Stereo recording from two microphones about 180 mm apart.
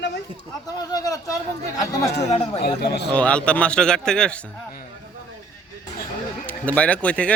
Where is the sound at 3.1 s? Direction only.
5° left (ahead or behind).